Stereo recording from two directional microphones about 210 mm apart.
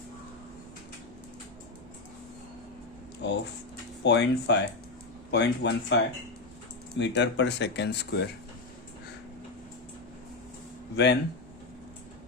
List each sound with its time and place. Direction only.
3.2 s speech: 55° left (ahead or behind)
10.9 s speech: 55° left (ahead or behind)